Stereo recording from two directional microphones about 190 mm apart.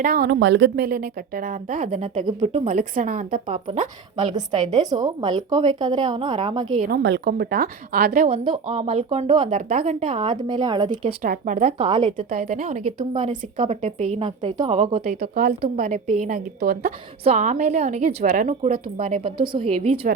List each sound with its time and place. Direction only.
0.0 s a woman's voice: 55° right (ahead or behind); by 3.8 s 30° right (ahead or behind)
4.3 s a woman's voice: 20° right (ahead or behind)
6.7 s speech: 45° right (ahead or behind)
7.0 s speech: 60° right (ahead or behind)
8.3 s a woman's voice: 30° right (ahead or behind)
9.5 s a woman's voice: 40° right (ahead or behind); by 11.1 s 25° right (ahead or behind)
11.2 s speech: 45° right (ahead or behind)
11.8 s a woman's voice: 25° right (ahead or behind)
12.1 s a woman's voice: 45° right (ahead or behind)
14.2 s a woman's voice: 25° right (ahead or behind)
15.0 s speech: 50° right (ahead or behind)
15.6 s speech: 40° right (ahead or behind)
17.2 s a woman's voice: 40° right (ahead or behind)